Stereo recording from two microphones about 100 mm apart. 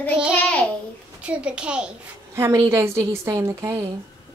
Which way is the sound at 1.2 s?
10° right (ahead or behind).